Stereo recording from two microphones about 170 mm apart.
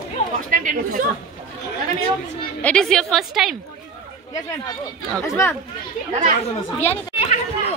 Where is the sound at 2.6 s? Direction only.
5° left (ahead or behind).